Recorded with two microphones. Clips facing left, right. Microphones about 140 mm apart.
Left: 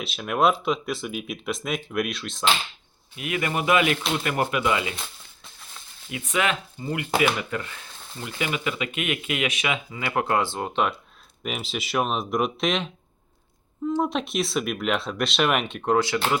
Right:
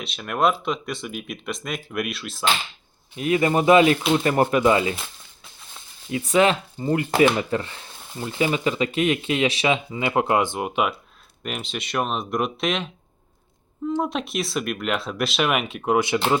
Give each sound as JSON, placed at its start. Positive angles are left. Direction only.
{"t": 0.0, "sound": "speech", "side_deg": 0}
{"t": 3.2, "sound": "speech", "side_deg": -35}
{"t": 6.1, "sound": "speech", "side_deg": -35}
{"t": 11.4, "sound": "speech", "side_deg": 0}
{"t": 14.0, "sound": "speech", "side_deg": 0}
{"t": 16.0, "sound": "speech", "side_deg": -20}